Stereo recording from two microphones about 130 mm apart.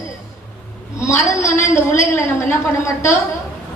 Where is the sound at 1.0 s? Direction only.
20° left (ahead or behind).